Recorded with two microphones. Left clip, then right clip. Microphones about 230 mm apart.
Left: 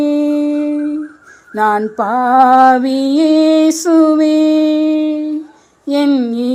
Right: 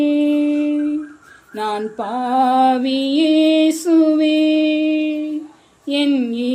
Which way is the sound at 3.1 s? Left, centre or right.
Centre.